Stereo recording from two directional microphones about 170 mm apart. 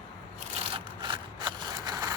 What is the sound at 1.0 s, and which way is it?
Scissors, 25° right (ahead or behind).